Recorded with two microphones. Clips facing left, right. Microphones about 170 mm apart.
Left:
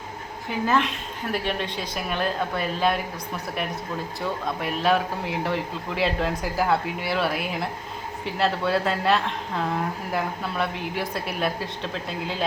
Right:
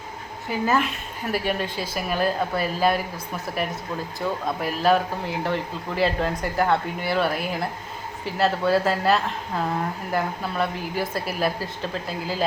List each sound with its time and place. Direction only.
0.6 s speech: 5° right (ahead or behind)